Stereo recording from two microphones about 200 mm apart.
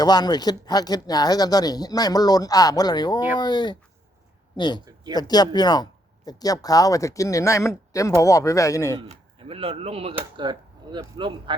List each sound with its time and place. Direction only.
0.0 s speech: 20° left (ahead or behind)
9.0 s speech: 30° right (ahead or behind)